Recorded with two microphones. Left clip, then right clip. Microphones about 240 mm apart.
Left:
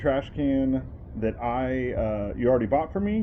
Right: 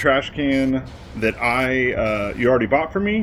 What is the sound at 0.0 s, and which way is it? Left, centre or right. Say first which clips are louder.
Speech: right 7 dB; centre.